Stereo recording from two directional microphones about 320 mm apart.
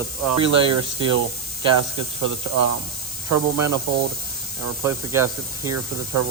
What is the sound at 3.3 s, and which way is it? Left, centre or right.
Speech, right.